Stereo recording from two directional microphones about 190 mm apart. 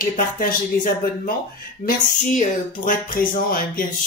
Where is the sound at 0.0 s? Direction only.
45° left (ahead or behind).